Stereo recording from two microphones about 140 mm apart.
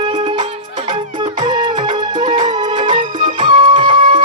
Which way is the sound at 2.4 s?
55° right (ahead or behind).